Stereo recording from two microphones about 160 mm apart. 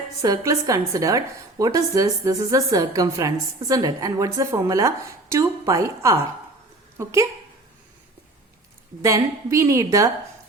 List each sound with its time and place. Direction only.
0.2 s a woman's voice: 20° right (ahead or behind)
9.0 s a woman's voice: 20° right (ahead or behind)